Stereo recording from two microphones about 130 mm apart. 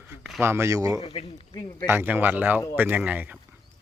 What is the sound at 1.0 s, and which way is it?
Speech, 45° left (ahead or behind).